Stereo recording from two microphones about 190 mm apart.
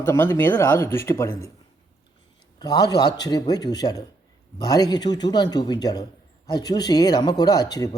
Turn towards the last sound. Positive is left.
turn(degrees=20)  # may be behind; listen again after turning